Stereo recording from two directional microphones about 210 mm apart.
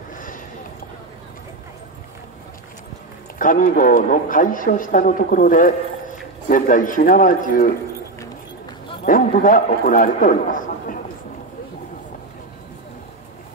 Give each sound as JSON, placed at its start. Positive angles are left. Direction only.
{"t": 0.1, "sound": "a sound", "side_deg": 40}
{"t": 3.3, "sound": "a man's voice", "side_deg": 40}
{"t": 9.0, "sound": "a man's voice", "side_deg": 40}